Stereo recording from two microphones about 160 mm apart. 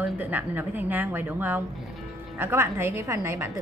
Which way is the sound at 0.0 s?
10° right (ahead or behind).